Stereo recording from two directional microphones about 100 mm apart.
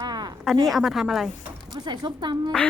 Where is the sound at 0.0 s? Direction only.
45° right (ahead or behind).